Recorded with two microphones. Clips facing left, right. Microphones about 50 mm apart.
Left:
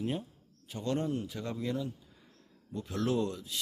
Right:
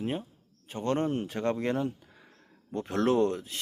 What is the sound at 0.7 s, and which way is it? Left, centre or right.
Speech, right.